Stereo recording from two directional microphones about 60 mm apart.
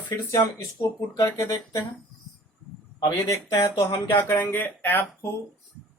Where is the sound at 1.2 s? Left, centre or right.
Left.